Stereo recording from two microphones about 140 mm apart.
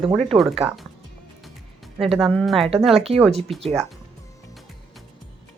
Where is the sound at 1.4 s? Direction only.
Centre (ahead or behind).